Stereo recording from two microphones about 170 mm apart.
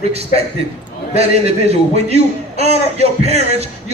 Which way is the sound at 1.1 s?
35° right (ahead or behind).